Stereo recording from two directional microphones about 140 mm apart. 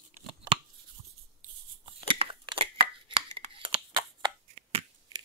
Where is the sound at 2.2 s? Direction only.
40° right (ahead or behind).